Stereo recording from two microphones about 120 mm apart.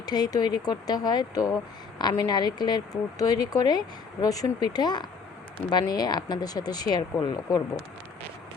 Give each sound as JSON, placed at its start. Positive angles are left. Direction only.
{"t": 0.0, "sound": "a woman's voice", "side_deg": 35}